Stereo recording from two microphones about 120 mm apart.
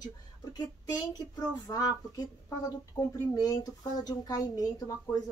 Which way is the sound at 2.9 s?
10° left (ahead or behind).